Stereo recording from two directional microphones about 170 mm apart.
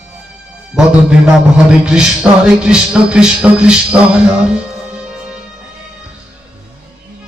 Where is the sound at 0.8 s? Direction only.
5° right (ahead or behind).